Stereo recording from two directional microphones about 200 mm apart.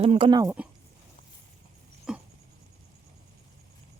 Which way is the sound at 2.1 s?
5° right (ahead or behind).